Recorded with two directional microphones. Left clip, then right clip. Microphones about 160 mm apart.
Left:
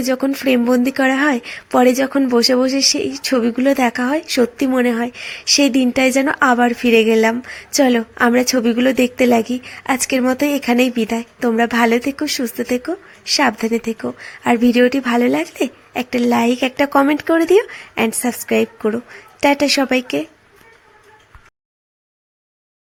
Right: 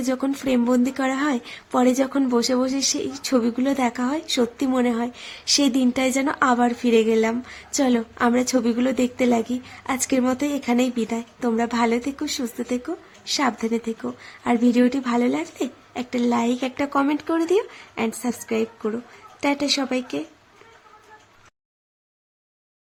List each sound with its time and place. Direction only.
0.0 s speech: 20° left (ahead or behind)